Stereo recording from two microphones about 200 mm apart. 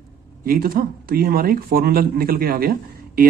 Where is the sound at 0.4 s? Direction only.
45° right (ahead or behind).